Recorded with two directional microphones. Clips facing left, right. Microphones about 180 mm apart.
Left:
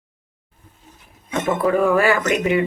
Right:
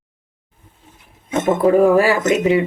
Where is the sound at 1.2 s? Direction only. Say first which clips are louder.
Right 4 dB; 25° right (ahead or behind).